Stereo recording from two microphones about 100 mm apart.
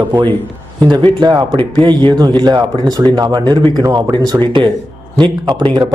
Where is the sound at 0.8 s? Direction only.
45° right (ahead or behind).